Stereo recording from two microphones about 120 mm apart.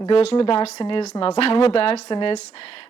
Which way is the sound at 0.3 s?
50° left (ahead or behind).